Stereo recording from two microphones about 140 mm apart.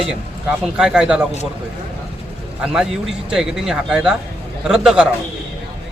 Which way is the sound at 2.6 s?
5° right (ahead or behind).